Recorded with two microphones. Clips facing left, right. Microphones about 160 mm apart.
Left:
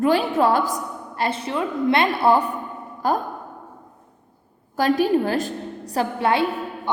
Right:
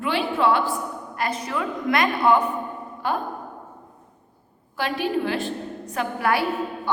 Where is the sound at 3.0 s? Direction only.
40° left (ahead or behind).